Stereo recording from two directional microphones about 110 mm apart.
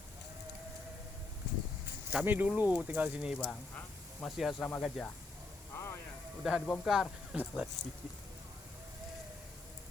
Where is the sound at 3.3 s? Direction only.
5° left (ahead or behind).